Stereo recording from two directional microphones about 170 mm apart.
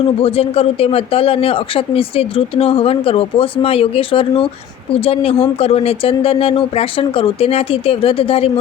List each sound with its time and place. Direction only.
0.2 s speech: 35° left (ahead or behind)